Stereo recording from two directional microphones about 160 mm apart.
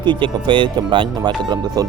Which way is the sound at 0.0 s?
30° right (ahead or behind).